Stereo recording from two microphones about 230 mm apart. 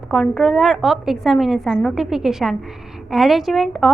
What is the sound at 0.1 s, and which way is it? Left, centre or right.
A woman's voice, centre.